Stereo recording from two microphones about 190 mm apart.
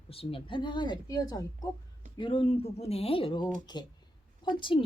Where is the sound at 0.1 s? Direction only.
30° left (ahead or behind).